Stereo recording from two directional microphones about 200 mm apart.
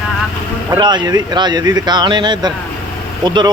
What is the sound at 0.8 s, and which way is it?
Speech, 20° right (ahead or behind).